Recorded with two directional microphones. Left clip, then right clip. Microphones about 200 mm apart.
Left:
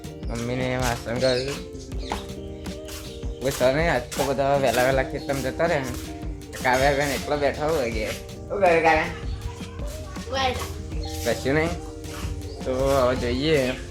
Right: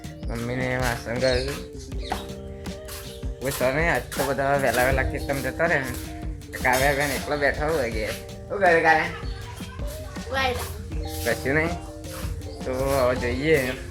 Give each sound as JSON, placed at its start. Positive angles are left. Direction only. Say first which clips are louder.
{"t": 0.3, "sound": "speech", "louder": "even", "side_deg": 0}
{"t": 3.4, "sound": "speech", "louder": "left 2 dB", "side_deg": 15}
{"t": 4.3, "sound": "speech", "louder": "left 1 dB", "side_deg": 5}
{"t": 4.8, "sound": "speech", "louder": "left 1 dB", "side_deg": 15}
{"t": 7.3, "sound": "speech", "louder": "right 1 dB", "side_deg": 0}
{"t": 10.3, "sound": "a child's voice", "louder": "even", "side_deg": -35}
{"t": 11.2, "sound": "speech", "louder": "even", "side_deg": 15}